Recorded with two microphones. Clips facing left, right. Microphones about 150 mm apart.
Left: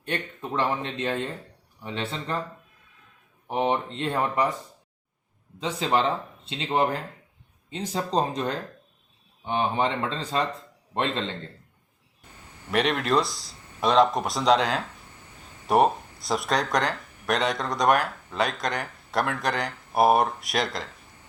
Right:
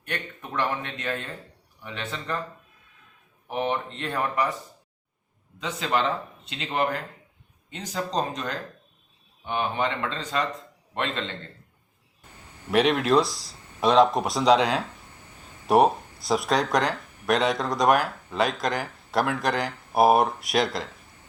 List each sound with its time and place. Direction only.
0.0 s speech: 25° left (ahead or behind)
3.4 s speech: 25° left (ahead or behind)
5.5 s speech: 30° left (ahead or behind)
12.7 s speech: centre (ahead or behind)